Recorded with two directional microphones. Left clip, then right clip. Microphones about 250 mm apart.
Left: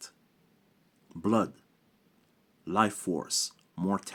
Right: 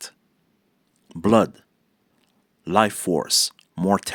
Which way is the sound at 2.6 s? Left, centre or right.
Right.